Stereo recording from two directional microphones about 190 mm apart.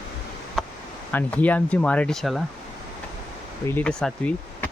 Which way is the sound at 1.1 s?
10° left (ahead or behind).